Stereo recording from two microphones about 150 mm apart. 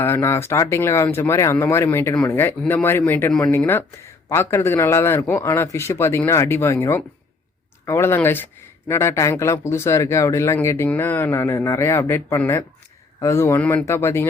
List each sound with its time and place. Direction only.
0.0 s speech: 15° left (ahead or behind)